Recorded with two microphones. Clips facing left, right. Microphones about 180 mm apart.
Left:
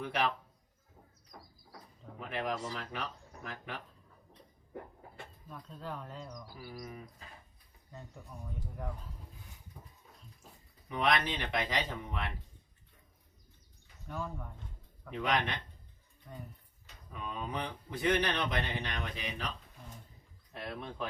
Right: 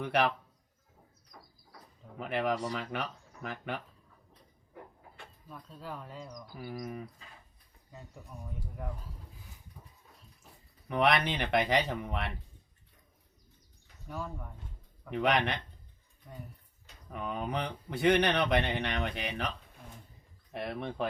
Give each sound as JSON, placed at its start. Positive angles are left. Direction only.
{"t": 0.0, "sound": "speech", "side_deg": -65}
{"t": 2.1, "sound": "speech", "side_deg": -65}
{"t": 5.5, "sound": "speech", "side_deg": -5}
{"t": 6.6, "sound": "speech", "side_deg": -55}
{"t": 7.9, "sound": "speech", "side_deg": -5}
{"t": 10.8, "sound": "speech", "side_deg": -65}
{"t": 14.1, "sound": "speech", "side_deg": -5}
{"t": 15.2, "sound": "speech", "side_deg": -65}
{"t": 17.1, "sound": "speech", "side_deg": -65}